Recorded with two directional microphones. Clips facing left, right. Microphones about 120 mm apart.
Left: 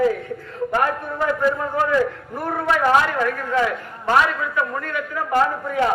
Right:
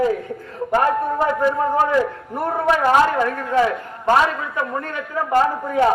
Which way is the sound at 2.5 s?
35° right (ahead or behind).